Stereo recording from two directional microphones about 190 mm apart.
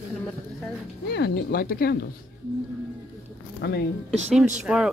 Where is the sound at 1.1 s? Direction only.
60° left (ahead or behind).